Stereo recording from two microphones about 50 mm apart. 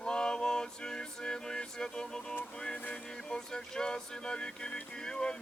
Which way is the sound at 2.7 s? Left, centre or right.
Left.